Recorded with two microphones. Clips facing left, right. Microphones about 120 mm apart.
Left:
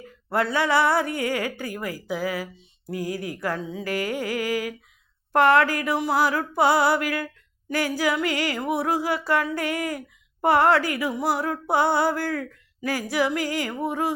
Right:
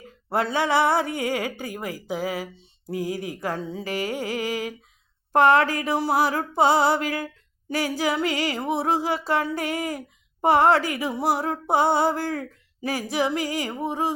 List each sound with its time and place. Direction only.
0.3 s speech: 20° right (ahead or behind)
3.6 s speech: 30° right (ahead or behind)